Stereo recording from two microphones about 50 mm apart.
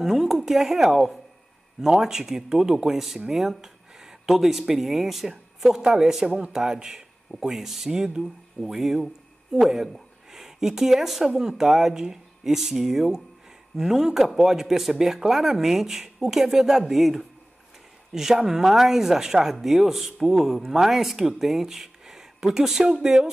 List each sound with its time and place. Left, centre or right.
0.0 s speech: centre
6.2 s speech: centre
6.6 s speech: centre